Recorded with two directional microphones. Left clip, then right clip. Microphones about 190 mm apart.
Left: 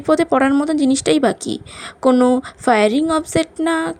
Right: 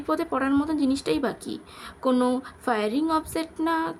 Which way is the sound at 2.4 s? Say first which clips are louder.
Left 12 dB; 35° left (ahead or behind).